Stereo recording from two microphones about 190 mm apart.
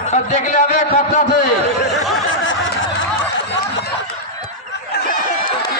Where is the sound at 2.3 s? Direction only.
80° left.